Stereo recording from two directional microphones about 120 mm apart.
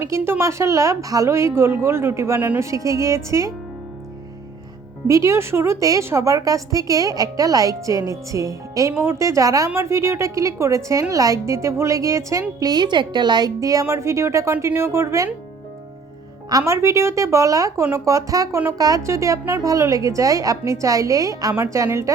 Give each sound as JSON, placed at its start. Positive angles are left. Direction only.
{"t": 0.0, "sound": "a woman's voice", "side_deg": -20}
{"t": 5.0, "sound": "a woman's voice", "side_deg": -25}
{"t": 16.5, "sound": "a woman's voice", "side_deg": -25}